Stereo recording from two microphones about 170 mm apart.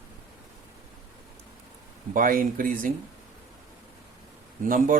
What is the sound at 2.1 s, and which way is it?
Speech, 55° right (ahead or behind).